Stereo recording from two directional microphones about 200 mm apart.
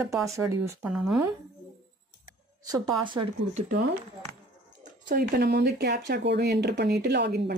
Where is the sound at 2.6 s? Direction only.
25° right (ahead or behind).